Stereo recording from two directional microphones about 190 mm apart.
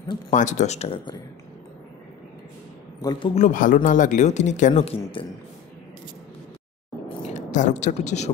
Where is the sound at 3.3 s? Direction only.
40° left (ahead or behind).